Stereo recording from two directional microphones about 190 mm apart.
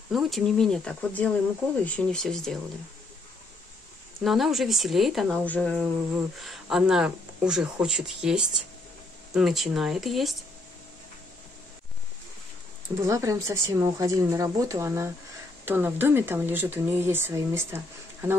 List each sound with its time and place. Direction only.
0.1 s speech: centre (ahead or behind)
4.2 s speech: centre (ahead or behind)
13.0 s speech: 15° right (ahead or behind)